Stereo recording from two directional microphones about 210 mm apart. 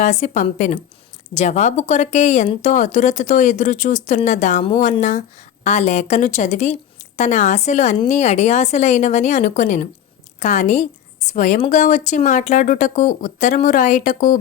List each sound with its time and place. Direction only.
0.0 s a woman's voice: 35° left (ahead or behind)